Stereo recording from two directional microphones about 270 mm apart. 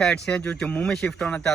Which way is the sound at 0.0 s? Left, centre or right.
Centre.